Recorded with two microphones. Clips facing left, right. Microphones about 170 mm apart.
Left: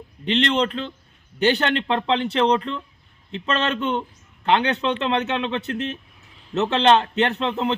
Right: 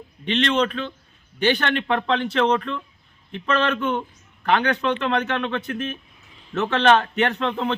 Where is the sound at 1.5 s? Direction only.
20° left (ahead or behind).